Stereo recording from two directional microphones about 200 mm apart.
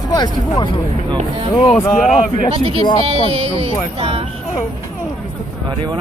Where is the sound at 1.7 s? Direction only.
5° left (ahead or behind).